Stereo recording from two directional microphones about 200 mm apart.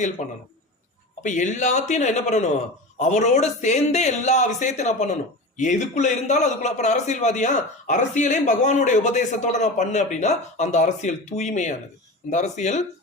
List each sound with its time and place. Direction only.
1.2 s a man's voice: 35° left (ahead or behind)